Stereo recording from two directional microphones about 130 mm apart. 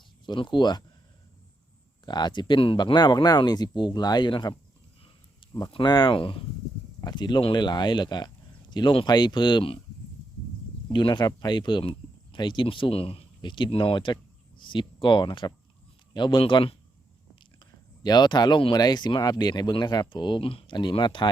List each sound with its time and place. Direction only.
0.3 s speech: 40° left (ahead or behind)
2.0 s speech: 35° left (ahead or behind)
10.9 s speech: 35° left (ahead or behind)
18.0 s speech: 35° left (ahead or behind)